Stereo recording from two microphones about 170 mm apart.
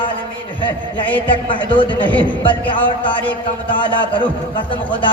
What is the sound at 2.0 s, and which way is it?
Speech, 10° left (ahead or behind).